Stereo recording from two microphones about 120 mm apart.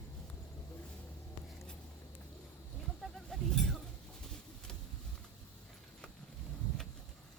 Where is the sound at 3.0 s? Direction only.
5° left (ahead or behind).